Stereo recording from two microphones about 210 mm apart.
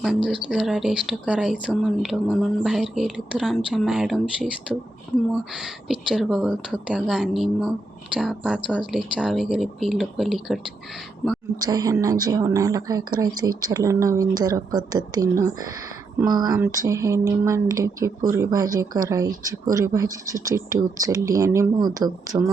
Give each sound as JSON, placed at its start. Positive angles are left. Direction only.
{"t": 0.0, "sound": "speech", "side_deg": 0}
{"t": 11.6, "sound": "a woman's voice", "side_deg": -15}